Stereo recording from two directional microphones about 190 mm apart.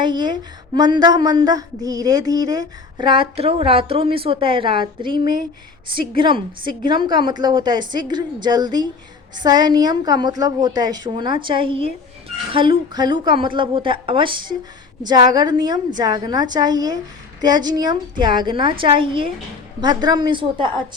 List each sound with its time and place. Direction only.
0.0 s a woman's voice: 25° right (ahead or behind)